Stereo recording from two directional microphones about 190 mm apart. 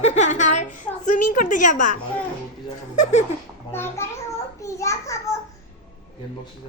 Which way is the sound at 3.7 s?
10° left (ahead or behind).